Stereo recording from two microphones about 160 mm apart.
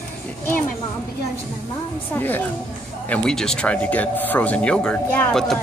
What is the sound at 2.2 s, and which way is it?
Speech, 10° left (ahead or behind).